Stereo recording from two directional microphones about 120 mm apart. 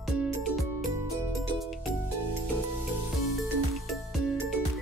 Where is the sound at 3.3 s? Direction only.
Centre (ahead or behind).